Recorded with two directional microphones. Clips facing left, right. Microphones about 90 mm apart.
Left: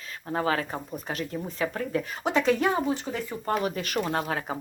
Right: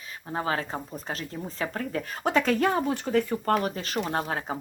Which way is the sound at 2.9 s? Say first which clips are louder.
Right 4 dB; 60° right (ahead or behind).